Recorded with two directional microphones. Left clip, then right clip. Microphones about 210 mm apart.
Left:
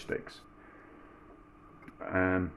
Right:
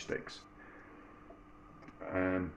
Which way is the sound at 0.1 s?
25° left (ahead or behind).